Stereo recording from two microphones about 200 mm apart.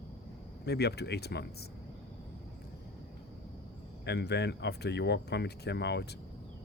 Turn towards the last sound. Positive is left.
turn(degrees=55)  # may be behind; listen again after turning